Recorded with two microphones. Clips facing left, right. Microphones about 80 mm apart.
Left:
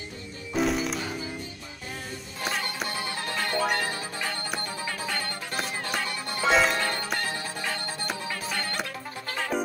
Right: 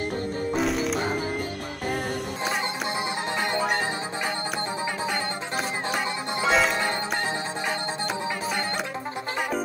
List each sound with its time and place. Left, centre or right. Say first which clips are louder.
0.6 s music: left 1 dB; centre
0.9 s music: right 6 dB; right
3.3 s music: even; centre
6.4 s music: even; centre